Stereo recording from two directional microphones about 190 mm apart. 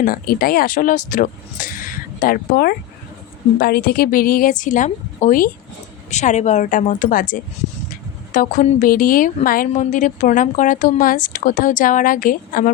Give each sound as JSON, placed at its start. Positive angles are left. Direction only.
{"t": 0.0, "sound": "a woman's voice", "side_deg": 50}